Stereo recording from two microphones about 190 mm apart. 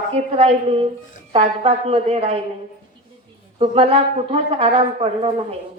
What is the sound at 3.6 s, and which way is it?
A woman's voice, 30° right (ahead or behind).